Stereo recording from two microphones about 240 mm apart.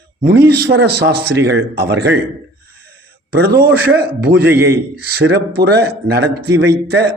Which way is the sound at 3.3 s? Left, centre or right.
Right.